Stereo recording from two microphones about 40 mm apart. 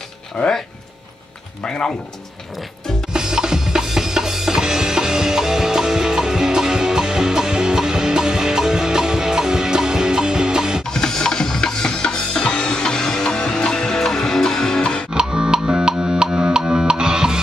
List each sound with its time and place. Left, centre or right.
1.6 s speech: left
3.1 s music: centre
10.9 s music: centre
15.1 s music: centre